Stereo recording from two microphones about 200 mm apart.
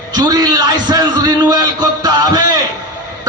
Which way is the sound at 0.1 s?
20° right (ahead or behind).